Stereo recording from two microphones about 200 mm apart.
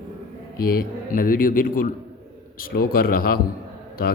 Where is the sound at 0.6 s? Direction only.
45° left (ahead or behind).